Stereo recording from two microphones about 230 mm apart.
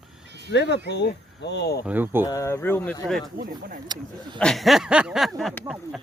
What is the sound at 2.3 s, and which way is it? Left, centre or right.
Speech, centre.